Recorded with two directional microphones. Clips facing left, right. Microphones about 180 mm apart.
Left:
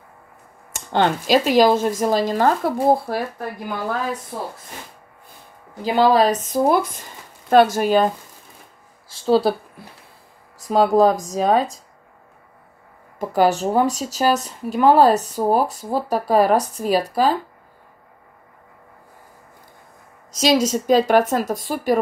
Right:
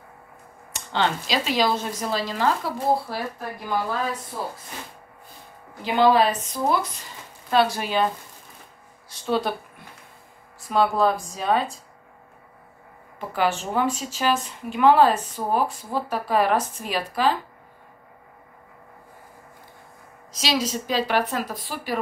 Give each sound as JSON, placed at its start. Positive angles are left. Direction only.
{"t": 0.7, "sound": "speech", "side_deg": 50}
{"t": 5.9, "sound": "speech", "side_deg": 40}
{"t": 9.1, "sound": "speech", "side_deg": 30}
{"t": 10.6, "sound": "speech", "side_deg": 40}
{"t": 13.2, "sound": "speech", "side_deg": 40}
{"t": 20.2, "sound": "speech", "side_deg": 45}